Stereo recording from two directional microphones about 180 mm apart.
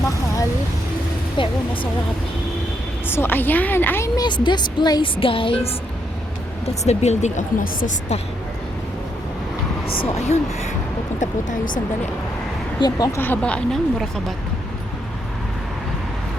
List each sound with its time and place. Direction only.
1.4 s speech: 30° left (ahead or behind)
3.1 s speech: 10° left (ahead or behind); by 5.5 s 30° left (ahead or behind)
6.8 s speech: 40° left (ahead or behind)
9.8 s speech: 30° left (ahead or behind)
12.8 s speech: 15° left (ahead or behind)